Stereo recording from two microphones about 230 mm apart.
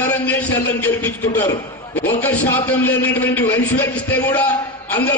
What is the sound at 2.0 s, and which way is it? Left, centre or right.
A man's voice, centre.